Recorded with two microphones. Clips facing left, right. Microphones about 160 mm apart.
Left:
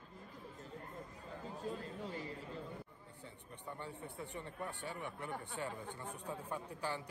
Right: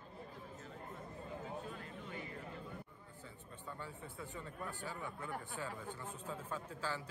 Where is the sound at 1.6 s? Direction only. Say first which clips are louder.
Left 5 dB; 35° left (ahead or behind).